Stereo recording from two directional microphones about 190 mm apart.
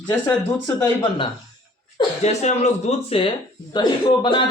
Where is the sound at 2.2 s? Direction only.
35° left (ahead or behind).